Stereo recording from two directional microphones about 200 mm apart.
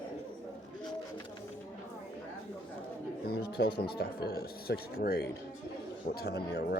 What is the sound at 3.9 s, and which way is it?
Speech, 50° left (ahead or behind).